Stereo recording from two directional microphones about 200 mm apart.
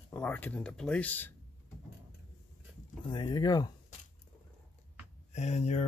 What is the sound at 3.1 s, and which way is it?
Speech, 20° left (ahead or behind).